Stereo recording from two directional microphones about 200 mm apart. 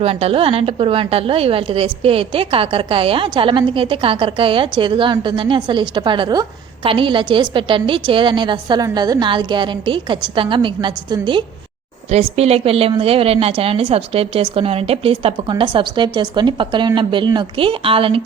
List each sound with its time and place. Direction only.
0.0 s a woman's voice: 30° right (ahead or behind)